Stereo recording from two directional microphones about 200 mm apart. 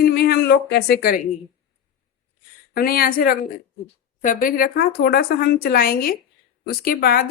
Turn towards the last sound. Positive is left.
turn(degrees=50)  # may be behind; listen again after turning